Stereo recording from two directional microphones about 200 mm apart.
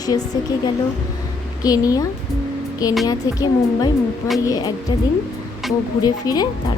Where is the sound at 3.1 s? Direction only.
20° left (ahead or behind).